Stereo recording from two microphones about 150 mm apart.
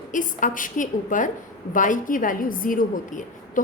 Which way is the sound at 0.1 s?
60° left (ahead or behind).